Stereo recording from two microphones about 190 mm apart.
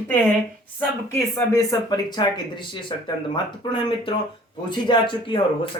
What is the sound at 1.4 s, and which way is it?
A man's voice, 20° left (ahead or behind).